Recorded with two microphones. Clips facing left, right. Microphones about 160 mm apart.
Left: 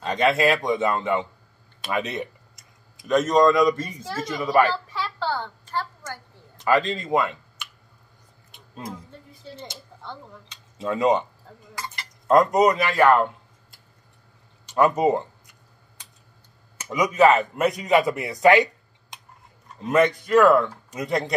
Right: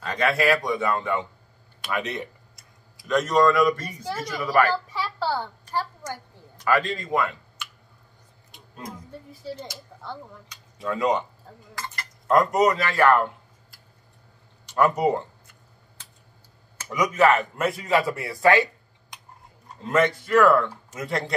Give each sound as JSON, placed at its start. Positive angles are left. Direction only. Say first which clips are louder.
{"t": 0.0, "sound": "a man's voice", "louder": "left 3 dB", "side_deg": 20}
{"t": 3.8, "sound": "a woman's voice", "louder": "right 1 dB", "side_deg": 0}
{"t": 4.2, "sound": "a man's voice", "louder": "left 2 dB", "side_deg": 25}
{"t": 4.9, "sound": "a sound", "louder": "right 1 dB", "side_deg": -10}
{"t": 6.6, "sound": "speech", "louder": "left 2 dB", "side_deg": 20}
{"t": 9.3, "sound": "a woman's voice", "louder": "right 5 dB", "side_deg": -5}
{"t": 10.5, "sound": "speech", "louder": "left 2 dB", "side_deg": 20}
{"t": 12.3, "sound": "a man's voice", "louder": "left 2 dB", "side_deg": 20}
{"t": 16.0, "sound": "a sound", "louder": "even", "side_deg": 15}
{"t": 16.9, "sound": "a man's voice", "louder": "left 2 dB", "side_deg": 20}